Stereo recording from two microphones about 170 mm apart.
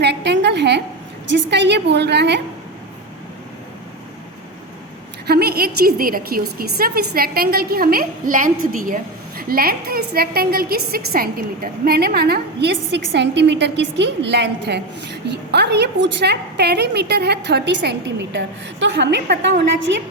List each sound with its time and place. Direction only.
0.0 s a sound: 85° right
1.3 s a woman's voice: 90° right
5.2 s a woman's voice: 70° right (ahead or behind); by 20.0 s 90° right